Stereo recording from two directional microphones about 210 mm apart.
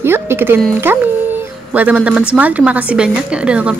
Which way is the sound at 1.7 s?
5° right (ahead or behind).